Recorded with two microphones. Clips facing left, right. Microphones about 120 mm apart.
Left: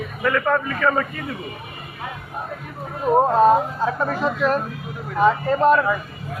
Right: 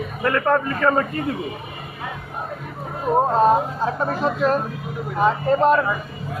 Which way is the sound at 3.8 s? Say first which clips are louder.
Even; 35° right (ahead or behind).